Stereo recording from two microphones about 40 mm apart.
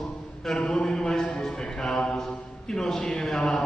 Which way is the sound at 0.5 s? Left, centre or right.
Centre.